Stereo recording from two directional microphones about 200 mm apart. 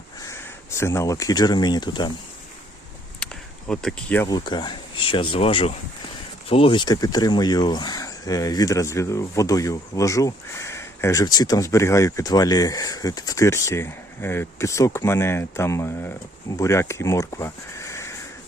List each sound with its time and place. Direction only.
0.2 s speech: 15° left (ahead or behind)
3.7 s speech: 5° left (ahead or behind)
4.3 s speech: 20° left (ahead or behind)